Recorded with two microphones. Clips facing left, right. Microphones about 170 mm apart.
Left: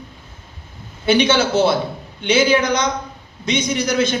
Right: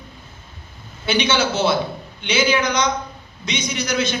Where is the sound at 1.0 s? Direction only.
50° left (ahead or behind).